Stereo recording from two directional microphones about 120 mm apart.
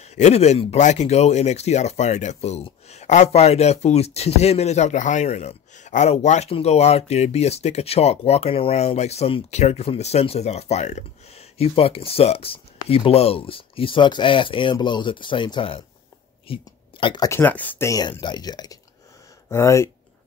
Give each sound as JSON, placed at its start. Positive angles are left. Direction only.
{"t": 0.0, "sound": "speech", "side_deg": 65}
{"t": 17.0, "sound": "speech", "side_deg": 40}
{"t": 17.3, "sound": "speech", "side_deg": 15}
{"t": 18.2, "sound": "speech", "side_deg": 35}
{"t": 19.5, "sound": "speech", "side_deg": 25}